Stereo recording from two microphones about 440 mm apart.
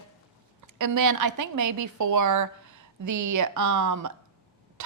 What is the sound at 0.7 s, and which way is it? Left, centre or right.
A woman's voice, right.